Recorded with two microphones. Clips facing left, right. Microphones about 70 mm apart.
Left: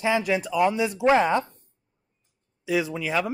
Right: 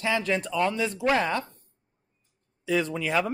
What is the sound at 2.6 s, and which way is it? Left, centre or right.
Speech, centre.